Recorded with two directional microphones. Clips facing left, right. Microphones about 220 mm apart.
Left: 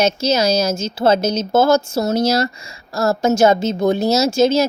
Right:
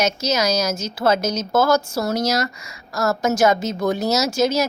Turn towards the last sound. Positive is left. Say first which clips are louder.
# left 5 dB
turn(degrees=25)  # may be behind; listen again after turning